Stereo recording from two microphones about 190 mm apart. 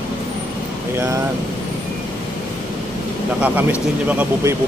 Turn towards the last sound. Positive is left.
turn(degrees=-10)  # may be behind; listen again after turning